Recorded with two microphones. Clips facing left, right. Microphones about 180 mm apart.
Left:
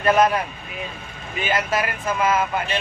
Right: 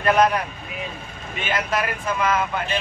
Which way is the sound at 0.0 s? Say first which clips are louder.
Left 1 dB; centre (ahead or behind).